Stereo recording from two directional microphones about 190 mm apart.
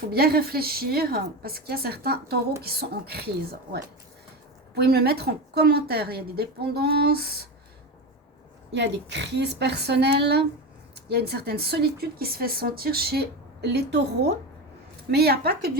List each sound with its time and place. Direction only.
0.1 s a woman's voice: 55° right (ahead or behind)
8.7 s speech: 65° right (ahead or behind)